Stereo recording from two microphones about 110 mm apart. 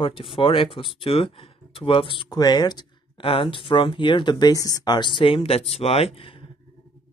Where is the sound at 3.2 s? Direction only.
55° left (ahead or behind).